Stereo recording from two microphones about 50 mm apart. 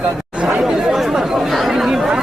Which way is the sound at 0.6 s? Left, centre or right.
Centre.